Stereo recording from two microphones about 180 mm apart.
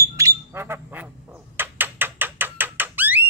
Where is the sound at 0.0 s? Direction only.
15° right (ahead or behind).